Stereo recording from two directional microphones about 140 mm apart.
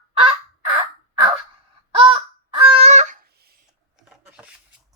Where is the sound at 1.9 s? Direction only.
40° right (ahead or behind).